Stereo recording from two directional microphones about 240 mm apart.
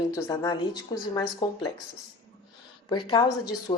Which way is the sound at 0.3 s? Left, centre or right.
Centre.